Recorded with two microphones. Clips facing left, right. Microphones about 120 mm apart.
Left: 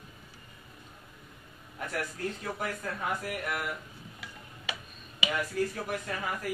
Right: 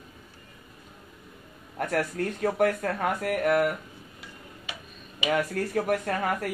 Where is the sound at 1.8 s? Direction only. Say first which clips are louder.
Right 7 dB; 60° right (ahead or behind).